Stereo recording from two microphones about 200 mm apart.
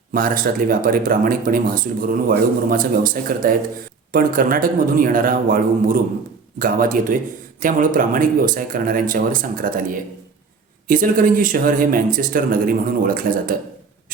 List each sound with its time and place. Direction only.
0.1 s speech: 45° right (ahead or behind)